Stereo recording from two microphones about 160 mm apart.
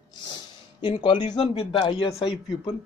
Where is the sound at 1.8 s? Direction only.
25° left (ahead or behind).